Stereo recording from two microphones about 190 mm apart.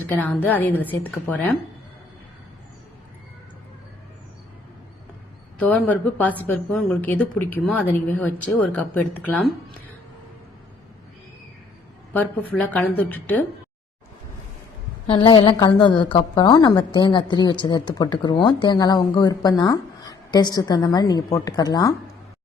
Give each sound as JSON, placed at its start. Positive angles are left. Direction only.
{"t": 0.1, "sound": "a woman's voice", "side_deg": 10}
{"t": 5.5, "sound": "a woman's voice", "side_deg": 5}
{"t": 12.1, "sound": "a woman's voice", "side_deg": 10}
{"t": 15.0, "sound": "a woman's voice", "side_deg": 25}